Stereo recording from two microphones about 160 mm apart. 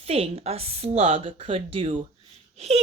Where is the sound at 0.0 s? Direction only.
40° right (ahead or behind).